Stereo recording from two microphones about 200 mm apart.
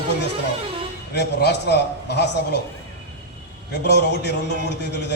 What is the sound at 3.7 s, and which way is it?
Speech, 55° left (ahead or behind).